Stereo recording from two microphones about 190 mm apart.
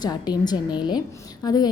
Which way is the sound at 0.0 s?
20° left (ahead or behind).